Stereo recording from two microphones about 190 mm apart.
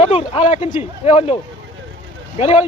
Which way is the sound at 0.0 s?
30° left (ahead or behind).